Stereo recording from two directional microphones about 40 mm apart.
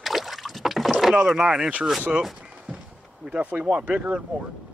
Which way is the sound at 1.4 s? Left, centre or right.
Centre.